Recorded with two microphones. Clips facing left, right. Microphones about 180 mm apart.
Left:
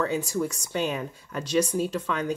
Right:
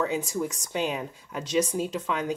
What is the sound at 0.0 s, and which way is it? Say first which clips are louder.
Speech: left 1 dB; 20° right (ahead or behind).